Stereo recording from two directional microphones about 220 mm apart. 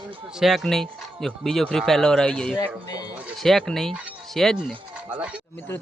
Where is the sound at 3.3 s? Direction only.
Centre (ahead or behind).